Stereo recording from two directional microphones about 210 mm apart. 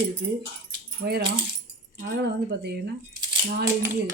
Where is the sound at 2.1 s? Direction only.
50° right (ahead or behind).